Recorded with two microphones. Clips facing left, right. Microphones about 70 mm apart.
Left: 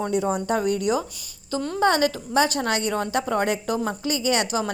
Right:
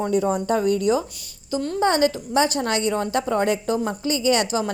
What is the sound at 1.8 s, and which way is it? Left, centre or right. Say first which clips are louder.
A woman's voice: even; right.